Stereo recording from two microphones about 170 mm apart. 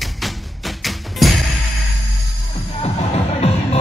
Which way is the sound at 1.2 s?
Centre (ahead or behind).